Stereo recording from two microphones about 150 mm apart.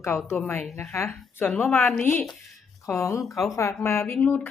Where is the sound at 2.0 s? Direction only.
10° left (ahead or behind).